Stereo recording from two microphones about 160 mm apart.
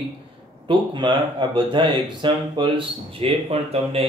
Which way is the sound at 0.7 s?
30° right (ahead or behind).